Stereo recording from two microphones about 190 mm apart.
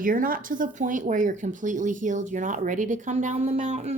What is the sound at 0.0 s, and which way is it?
A woman's voice, 45° right (ahead or behind).